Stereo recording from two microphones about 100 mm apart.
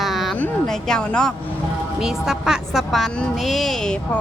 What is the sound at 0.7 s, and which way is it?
Speech, 5° left (ahead or behind).